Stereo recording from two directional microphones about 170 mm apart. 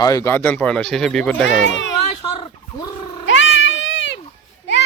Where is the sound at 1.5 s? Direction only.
90° left.